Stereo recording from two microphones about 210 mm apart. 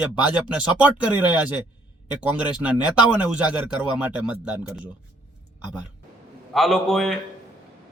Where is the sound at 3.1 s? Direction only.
5° right (ahead or behind).